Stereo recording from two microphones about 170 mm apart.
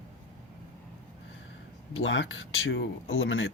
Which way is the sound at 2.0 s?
90° left.